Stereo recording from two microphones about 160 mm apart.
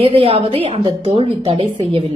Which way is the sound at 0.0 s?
35° right (ahead or behind).